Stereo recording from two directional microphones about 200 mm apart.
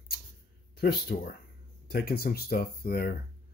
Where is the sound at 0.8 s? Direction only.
55° left (ahead or behind).